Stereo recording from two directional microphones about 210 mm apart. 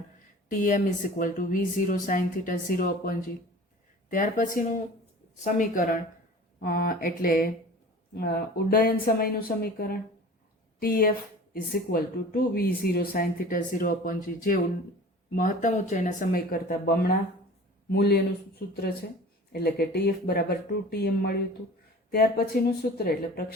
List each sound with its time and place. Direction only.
0.5 s speech: 40° left (ahead or behind)
19.5 s speech: 50° left (ahead or behind)